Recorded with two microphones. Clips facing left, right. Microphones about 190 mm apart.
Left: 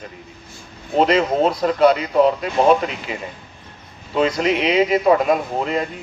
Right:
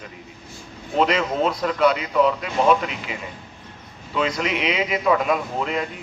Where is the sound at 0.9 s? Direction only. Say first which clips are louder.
Left 4 dB; 35° left (ahead or behind).